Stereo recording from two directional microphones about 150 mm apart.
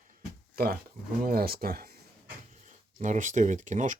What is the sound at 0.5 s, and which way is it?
Speech, 85° right.